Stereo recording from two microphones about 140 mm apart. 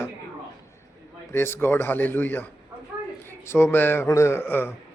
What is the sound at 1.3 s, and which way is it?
A man's voice, 15° left (ahead or behind).